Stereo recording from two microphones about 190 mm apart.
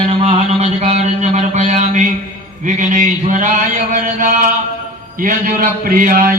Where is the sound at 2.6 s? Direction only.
40° right (ahead or behind).